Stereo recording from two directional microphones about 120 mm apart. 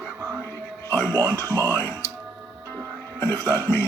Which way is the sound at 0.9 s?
15° left (ahead or behind).